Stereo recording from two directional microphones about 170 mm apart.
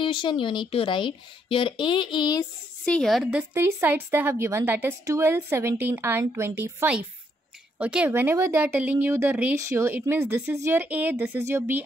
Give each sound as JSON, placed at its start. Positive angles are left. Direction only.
{"t": 0.0, "sound": "speech", "side_deg": 30}
{"t": 2.8, "sound": "a woman's voice", "side_deg": 5}